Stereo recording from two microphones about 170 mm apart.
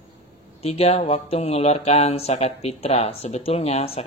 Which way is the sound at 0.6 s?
35° left (ahead or behind).